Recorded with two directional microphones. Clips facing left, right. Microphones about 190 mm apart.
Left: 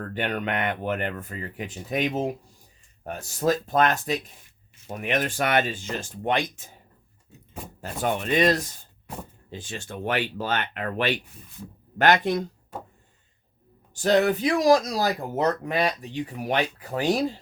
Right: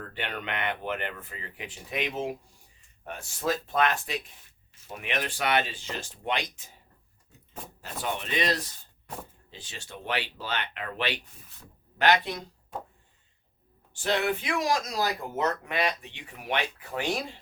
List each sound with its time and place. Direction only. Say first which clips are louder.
0.0 s speech: left 7 dB; 45° left (ahead or behind)
7.8 s speech: left 7 dB; 50° left (ahead or behind)
13.9 s speech: left 7 dB; 40° left (ahead or behind)